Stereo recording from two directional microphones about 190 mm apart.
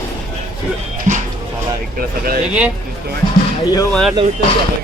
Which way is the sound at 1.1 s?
40° right (ahead or behind).